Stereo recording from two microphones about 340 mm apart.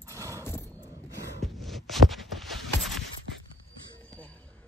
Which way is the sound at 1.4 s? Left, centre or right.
Centre.